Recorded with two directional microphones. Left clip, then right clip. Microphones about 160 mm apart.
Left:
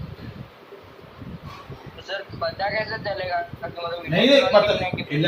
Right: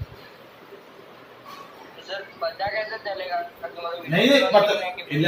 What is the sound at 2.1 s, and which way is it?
Speech, 20° left (ahead or behind).